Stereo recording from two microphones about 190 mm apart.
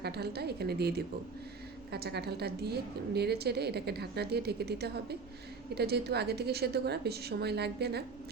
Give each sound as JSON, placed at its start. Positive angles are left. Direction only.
{"t": 0.0, "sound": "a woman's voice", "side_deg": -60}